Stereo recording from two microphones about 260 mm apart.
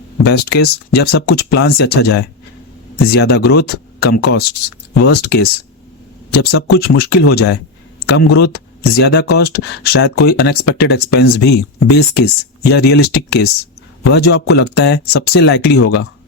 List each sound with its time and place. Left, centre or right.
0.3 s speech: left